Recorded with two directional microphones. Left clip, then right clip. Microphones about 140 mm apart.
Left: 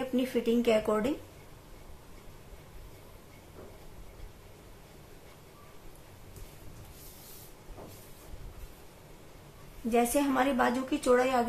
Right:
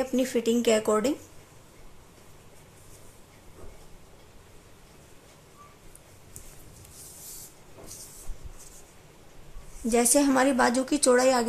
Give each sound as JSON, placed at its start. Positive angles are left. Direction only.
{"t": 0.1, "sound": "speech", "side_deg": -50}
{"t": 9.8, "sound": "a woman's voice", "side_deg": -60}